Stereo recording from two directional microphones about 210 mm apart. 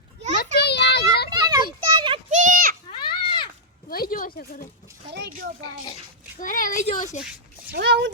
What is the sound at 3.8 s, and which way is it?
Speech, 45° left (ahead or behind).